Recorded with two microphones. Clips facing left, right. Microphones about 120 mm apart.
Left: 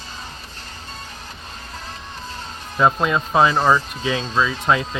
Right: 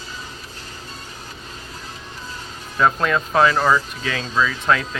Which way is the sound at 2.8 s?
15° left (ahead or behind).